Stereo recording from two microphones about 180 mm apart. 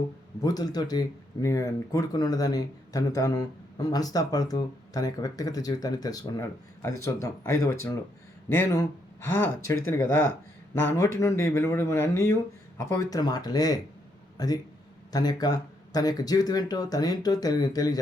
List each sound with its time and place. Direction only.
0.4 s speech: 20° left (ahead or behind)